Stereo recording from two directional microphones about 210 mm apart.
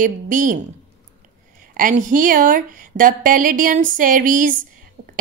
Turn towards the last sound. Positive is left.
turn(degrees=-40)  # may be behind; listen again after turning